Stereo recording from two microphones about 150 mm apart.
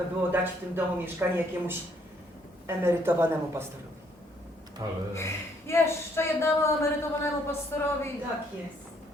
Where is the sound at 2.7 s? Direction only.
15° right (ahead or behind).